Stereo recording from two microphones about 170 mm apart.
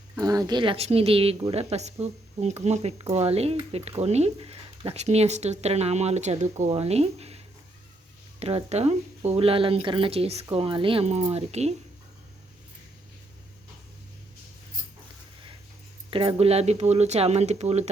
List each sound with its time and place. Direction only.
0.2 s speech: 20° right (ahead or behind); by 11.7 s 40° right (ahead or behind)
16.0 s speech: 30° right (ahead or behind)